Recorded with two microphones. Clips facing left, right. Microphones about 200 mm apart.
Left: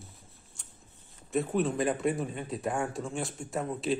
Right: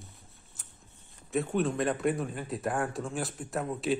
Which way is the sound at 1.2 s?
Centre (ahead or behind).